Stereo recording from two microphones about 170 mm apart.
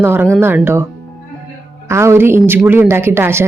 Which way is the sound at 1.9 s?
15° right (ahead or behind).